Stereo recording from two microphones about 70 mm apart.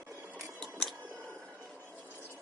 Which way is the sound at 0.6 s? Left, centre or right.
Centre.